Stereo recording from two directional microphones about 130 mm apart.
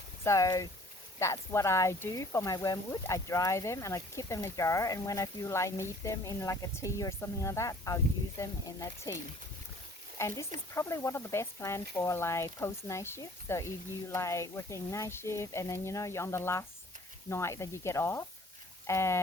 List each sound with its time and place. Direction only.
0.3 s speech: 25° left (ahead or behind)
10.2 s speech: 20° left (ahead or behind)